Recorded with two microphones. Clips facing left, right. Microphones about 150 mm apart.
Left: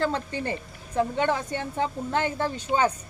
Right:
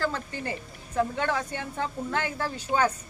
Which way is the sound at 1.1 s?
20° left (ahead or behind).